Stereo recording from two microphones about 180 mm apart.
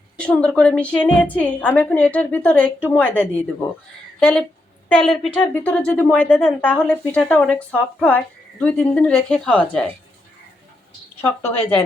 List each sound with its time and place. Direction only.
0.2 s a woman's voice: 5° left (ahead or behind)